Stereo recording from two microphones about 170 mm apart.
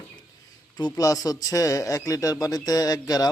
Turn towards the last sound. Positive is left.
turn(degrees=20)  # may be behind; listen again after turning